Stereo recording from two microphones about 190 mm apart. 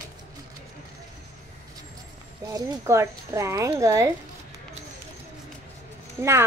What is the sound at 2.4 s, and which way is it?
A child's voice, 15° right (ahead or behind).